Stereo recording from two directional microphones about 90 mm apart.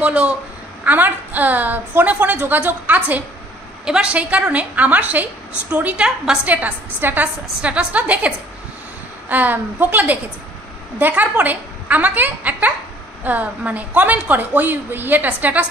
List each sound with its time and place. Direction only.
0.0 s a woman's voice: 15° right (ahead or behind)
6.4 s a woman's voice: 15° right (ahead or behind)
9.3 s a woman's voice: 20° right (ahead or behind)